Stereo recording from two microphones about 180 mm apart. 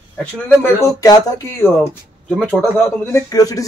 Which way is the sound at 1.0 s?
20° left (ahead or behind).